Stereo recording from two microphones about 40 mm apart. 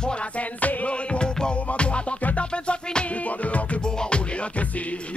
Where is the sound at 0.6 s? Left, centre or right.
Left.